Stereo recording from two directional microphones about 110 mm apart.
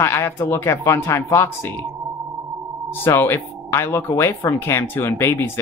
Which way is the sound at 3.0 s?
20° left (ahead or behind).